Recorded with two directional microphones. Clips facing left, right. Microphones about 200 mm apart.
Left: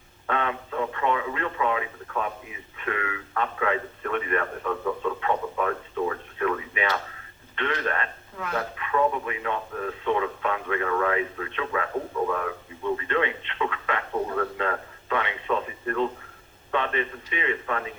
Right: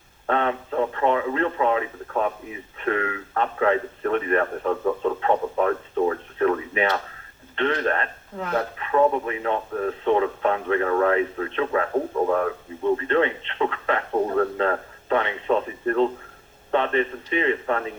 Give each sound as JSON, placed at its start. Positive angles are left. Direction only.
{"t": 0.3, "sound": "speech", "side_deg": -35}